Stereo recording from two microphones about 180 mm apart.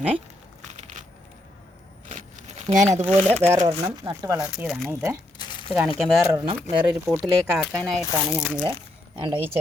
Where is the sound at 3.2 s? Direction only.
15° right (ahead or behind).